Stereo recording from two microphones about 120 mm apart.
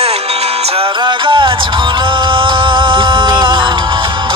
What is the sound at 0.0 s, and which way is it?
Music, 60° right (ahead or behind).